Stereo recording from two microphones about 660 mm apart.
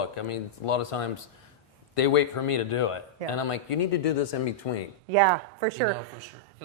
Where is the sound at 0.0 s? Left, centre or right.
Left.